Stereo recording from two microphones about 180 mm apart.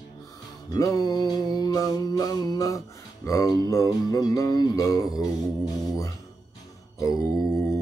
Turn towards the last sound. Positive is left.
turn(degrees=0)  # may be behind; listen again after turning